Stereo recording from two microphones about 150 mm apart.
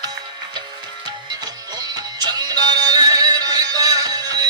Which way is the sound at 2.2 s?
25° right (ahead or behind).